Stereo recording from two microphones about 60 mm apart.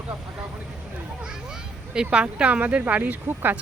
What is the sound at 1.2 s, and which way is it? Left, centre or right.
A child's voice, centre.